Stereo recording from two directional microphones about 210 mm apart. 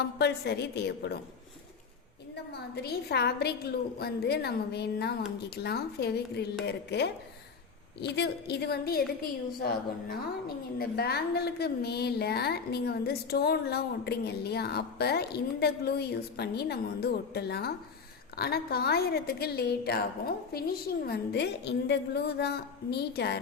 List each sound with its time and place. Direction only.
0.0 s a woman's voice: 50° left (ahead or behind)
2.3 s a woman's voice: 50° left (ahead or behind)
10.8 s a woman's voice: 50° left (ahead or behind)